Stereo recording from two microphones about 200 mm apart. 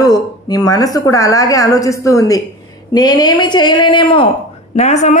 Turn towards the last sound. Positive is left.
turn(degrees=35)  # may be behind; listen again after turning